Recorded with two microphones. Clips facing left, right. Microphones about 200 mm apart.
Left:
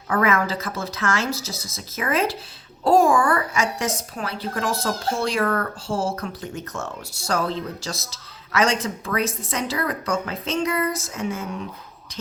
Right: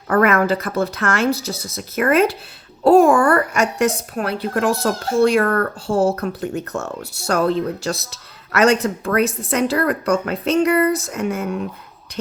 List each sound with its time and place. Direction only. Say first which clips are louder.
0.1 s a woman's voice: right 6 dB; 60° right (ahead or behind)